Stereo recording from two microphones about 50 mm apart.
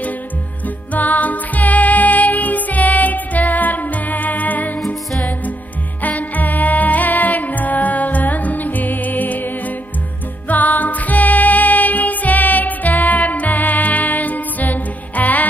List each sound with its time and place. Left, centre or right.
0.9 s music: left
6.0 s music: left
10.5 s music: left